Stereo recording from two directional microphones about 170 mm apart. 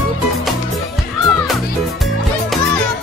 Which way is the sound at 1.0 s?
Centre (ahead or behind).